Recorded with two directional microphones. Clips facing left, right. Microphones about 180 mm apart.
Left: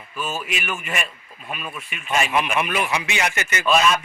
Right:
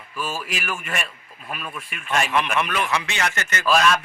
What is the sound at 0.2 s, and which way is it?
Speech, 25° left (ahead or behind).